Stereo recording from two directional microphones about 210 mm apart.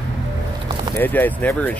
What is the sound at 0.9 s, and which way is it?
Speech, 10° left (ahead or behind).